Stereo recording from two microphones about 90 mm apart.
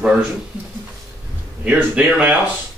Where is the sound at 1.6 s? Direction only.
15° right (ahead or behind).